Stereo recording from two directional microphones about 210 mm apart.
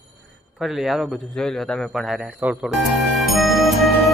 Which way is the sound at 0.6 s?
Centre (ahead or behind).